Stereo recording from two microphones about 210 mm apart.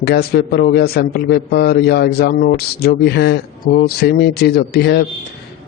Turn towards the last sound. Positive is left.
turn(degrees=50)  # may be behind; listen again after turning